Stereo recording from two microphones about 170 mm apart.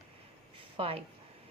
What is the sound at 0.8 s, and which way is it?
Speech, 35° right (ahead or behind).